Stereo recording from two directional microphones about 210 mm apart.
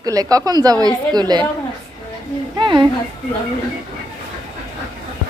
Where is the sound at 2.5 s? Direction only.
20° right (ahead or behind).